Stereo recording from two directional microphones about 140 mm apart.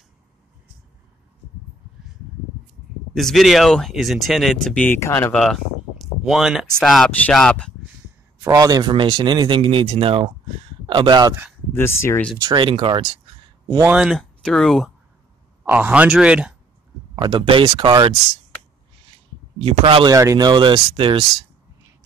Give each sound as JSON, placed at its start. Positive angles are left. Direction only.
{"t": 3.2, "sound": "speech", "side_deg": 0}
{"t": 8.5, "sound": "speech", "side_deg": -25}
{"t": 11.7, "sound": "speech", "side_deg": 20}
{"t": 12.4, "sound": "speech", "side_deg": -30}
{"t": 13.9, "sound": "speech", "side_deg": -5}
{"t": 15.6, "sound": "speech", "side_deg": -15}
{"t": 17.1, "sound": "speech", "side_deg": -30}
{"t": 19.6, "sound": "speech", "side_deg": -35}